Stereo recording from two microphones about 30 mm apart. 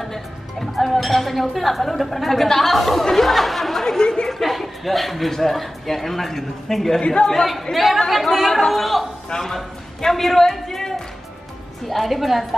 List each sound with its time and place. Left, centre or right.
0.0 s speech: centre
4.0 s a sound: left
4.3 s chuckle: centre
5.3 s speech: centre
7.0 s a woman's voice: left
7.7 s a man's voice: centre